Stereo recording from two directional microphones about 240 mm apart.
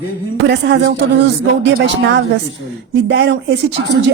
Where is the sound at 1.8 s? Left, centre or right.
Right.